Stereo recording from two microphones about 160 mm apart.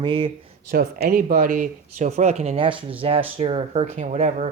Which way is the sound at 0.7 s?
65° right (ahead or behind).